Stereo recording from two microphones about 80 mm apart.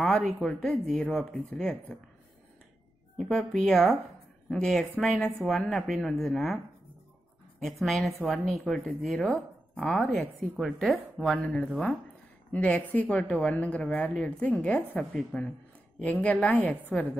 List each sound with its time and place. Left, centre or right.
0.1 s speech: centre
3.2 s speech: centre
7.6 s speech: centre
12.5 s speech: centre
15.3 s speech: centre
16.0 s speech: centre